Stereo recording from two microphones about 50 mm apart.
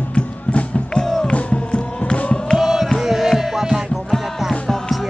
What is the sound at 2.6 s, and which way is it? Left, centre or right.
Music, centre.